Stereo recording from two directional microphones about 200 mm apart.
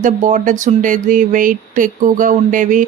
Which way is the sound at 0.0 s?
40° right (ahead or behind).